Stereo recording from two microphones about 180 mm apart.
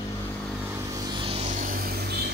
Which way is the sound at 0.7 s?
20° right (ahead or behind).